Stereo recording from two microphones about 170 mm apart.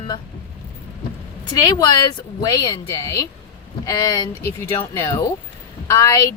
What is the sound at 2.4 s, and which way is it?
A woman's voice, 25° left (ahead or behind).